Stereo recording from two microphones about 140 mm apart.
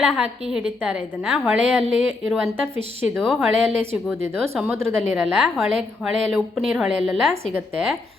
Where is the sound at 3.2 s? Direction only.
Centre (ahead or behind).